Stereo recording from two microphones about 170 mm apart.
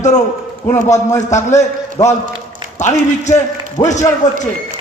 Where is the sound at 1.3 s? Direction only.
45° left (ahead or behind).